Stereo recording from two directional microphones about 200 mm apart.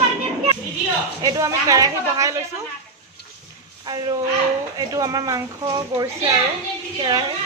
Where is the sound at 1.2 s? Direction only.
15° right (ahead or behind).